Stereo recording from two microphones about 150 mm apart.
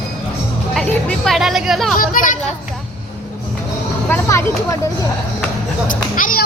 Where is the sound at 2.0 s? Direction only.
65° left (ahead or behind).